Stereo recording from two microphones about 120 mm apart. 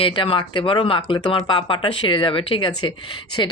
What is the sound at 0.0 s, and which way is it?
Speech, 45° left (ahead or behind).